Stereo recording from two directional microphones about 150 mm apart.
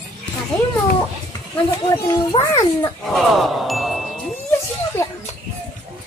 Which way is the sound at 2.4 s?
20° left (ahead or behind).